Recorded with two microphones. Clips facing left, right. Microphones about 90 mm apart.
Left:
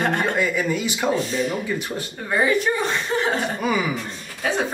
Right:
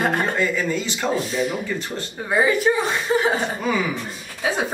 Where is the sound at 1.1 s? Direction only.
Centre (ahead or behind).